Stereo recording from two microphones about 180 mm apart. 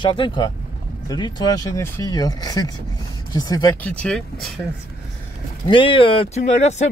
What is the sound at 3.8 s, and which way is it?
Speech, 5° left (ahead or behind).